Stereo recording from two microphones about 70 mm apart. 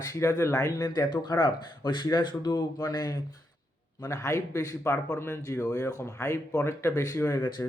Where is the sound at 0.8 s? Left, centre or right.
Left.